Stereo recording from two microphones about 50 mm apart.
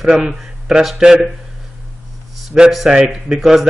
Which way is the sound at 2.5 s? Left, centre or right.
Centre.